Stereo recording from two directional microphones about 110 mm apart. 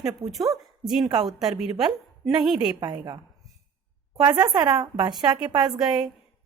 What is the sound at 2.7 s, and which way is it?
Speech, 40° right (ahead or behind).